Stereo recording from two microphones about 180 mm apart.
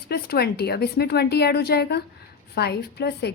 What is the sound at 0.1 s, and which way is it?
A woman's voice, 60° left (ahead or behind).